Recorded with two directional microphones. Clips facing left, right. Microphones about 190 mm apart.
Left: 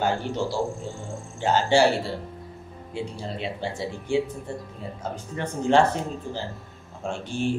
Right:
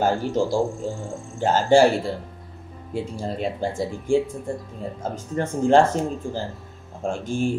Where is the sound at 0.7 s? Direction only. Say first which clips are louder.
Right 4 dB; centre (ahead or behind).